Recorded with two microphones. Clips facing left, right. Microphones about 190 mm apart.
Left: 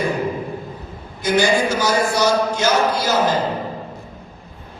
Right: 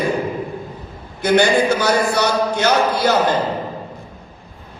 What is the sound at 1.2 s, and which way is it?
Speech, 60° right (ahead or behind).